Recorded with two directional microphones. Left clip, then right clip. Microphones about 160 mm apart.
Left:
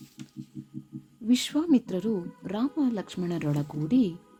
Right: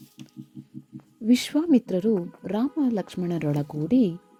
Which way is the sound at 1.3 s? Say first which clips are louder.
Right 3 dB; 25° right (ahead or behind).